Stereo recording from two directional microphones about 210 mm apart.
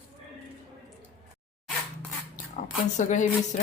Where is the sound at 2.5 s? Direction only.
35° left (ahead or behind).